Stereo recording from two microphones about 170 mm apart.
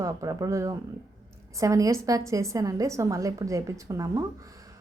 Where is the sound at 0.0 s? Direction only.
20° right (ahead or behind).